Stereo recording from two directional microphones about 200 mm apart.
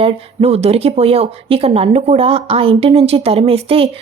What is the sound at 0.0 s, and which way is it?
Speech, 30° right (ahead or behind).